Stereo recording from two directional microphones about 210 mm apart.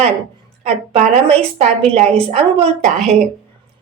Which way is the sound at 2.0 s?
30° right (ahead or behind).